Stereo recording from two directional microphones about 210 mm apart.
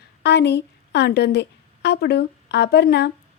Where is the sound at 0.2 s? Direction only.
55° left (ahead or behind).